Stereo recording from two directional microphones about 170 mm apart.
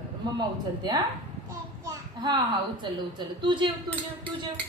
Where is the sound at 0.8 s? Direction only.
25° right (ahead or behind).